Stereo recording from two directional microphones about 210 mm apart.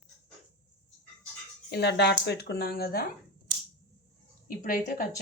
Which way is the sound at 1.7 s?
55° left (ahead or behind).